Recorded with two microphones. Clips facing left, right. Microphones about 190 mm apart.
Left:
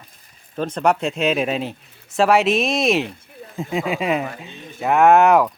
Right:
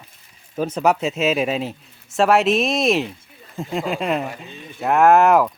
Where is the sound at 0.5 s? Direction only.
5° right (ahead or behind).